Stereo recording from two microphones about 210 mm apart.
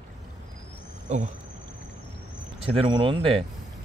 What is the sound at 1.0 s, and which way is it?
Speech, 35° right (ahead or behind).